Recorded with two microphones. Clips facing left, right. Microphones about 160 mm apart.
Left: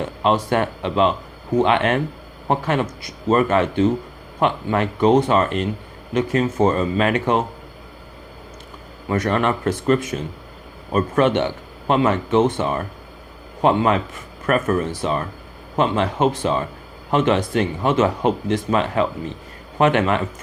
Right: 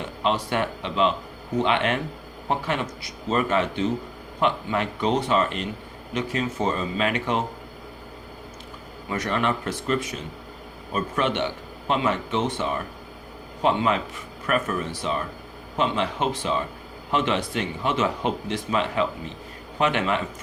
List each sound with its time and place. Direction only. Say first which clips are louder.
0.2 s speech: left 5 dB; 50° left (ahead or behind)
9.0 s speech: left 5 dB; 50° left (ahead or behind)